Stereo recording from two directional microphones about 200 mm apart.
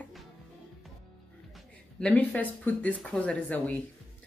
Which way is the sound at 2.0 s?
5° left (ahead or behind).